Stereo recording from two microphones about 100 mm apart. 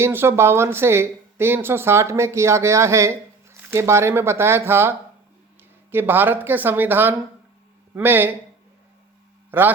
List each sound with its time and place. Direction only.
0.0 s speech: 25° right (ahead or behind)
9.5 s a man's voice: 20° right (ahead or behind)